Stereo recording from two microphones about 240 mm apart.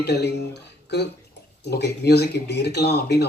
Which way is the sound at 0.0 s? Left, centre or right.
Left.